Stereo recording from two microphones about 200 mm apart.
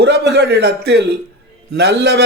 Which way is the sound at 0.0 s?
55° right (ahead or behind).